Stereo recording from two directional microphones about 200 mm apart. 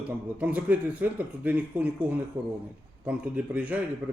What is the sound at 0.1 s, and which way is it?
Speech, 5° right (ahead or behind).